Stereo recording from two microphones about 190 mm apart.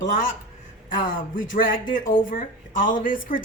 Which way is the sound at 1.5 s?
45° left (ahead or behind).